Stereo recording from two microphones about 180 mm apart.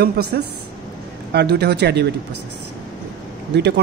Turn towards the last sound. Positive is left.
turn(degrees=-70)  # may be behind; listen again after turning